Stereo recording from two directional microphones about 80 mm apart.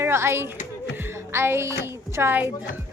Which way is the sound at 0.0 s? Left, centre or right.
Right.